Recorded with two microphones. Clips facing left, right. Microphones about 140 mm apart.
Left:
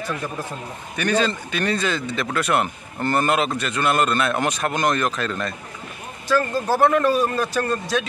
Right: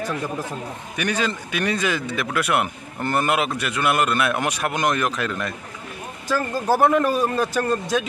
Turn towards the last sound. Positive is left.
turn(degrees=-15)  # may be behind; listen again after turning